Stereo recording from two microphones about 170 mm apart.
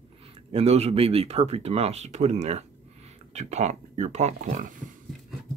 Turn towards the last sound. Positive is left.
turn(degrees=-50)  # may be behind; listen again after turning